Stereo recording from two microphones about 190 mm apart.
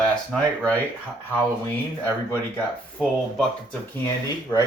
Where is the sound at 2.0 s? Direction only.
10° left (ahead or behind).